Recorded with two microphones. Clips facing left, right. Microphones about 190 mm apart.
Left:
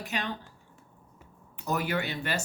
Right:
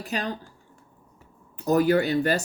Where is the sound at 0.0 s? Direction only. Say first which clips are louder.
Right 4 dB; 35° right (ahead or behind).